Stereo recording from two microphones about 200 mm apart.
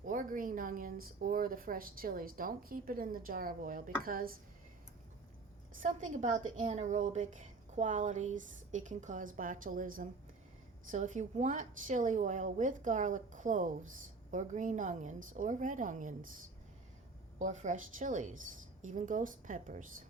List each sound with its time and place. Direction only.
0.0 s a woman's voice: 40° right (ahead or behind)
5.8 s a woman's voice: 40° right (ahead or behind)
17.4 s a woman's voice: 35° right (ahead or behind)